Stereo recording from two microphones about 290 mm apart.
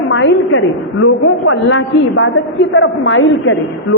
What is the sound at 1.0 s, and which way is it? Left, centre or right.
A woman's voice, left.